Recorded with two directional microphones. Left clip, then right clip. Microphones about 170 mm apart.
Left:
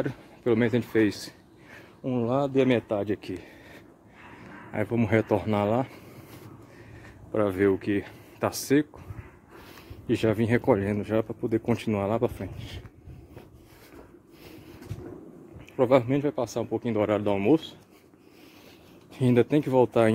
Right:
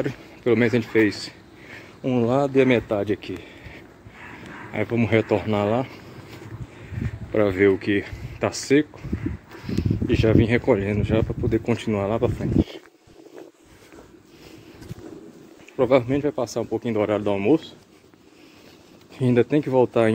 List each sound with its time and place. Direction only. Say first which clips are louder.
0.0 s speech: right 4 dB; 20° left (ahead or behind)
2.0 s speech: right 5 dB; 5° left (ahead or behind)
4.7 s speech: right 4 dB; 25° left (ahead or behind)
7.3 s speech: right 5 dB; 10° left (ahead or behind)
10.0 s speech: right 5 dB; 20° left (ahead or behind)
15.7 s speech: right 3 dB; 20° left (ahead or behind)
19.1 s speech: right 3 dB; 20° left (ahead or behind)